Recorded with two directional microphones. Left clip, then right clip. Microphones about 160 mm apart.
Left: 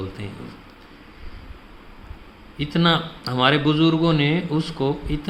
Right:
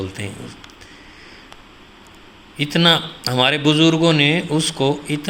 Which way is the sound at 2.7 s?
20° right (ahead or behind).